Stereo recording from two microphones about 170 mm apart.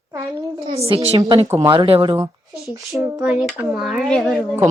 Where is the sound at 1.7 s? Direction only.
30° right (ahead or behind).